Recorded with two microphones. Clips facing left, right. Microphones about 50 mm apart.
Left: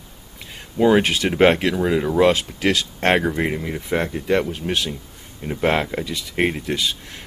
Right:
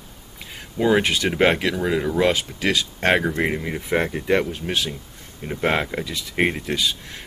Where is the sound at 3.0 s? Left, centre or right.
Centre.